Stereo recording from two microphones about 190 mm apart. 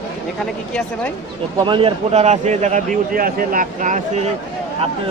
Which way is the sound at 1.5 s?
25° right (ahead or behind).